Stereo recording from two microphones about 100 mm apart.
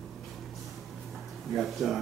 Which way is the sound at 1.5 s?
Centre (ahead or behind).